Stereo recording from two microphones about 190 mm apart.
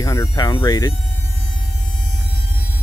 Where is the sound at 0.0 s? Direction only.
15° left (ahead or behind).